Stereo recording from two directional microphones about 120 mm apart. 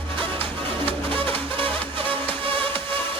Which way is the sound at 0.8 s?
50° right (ahead or behind).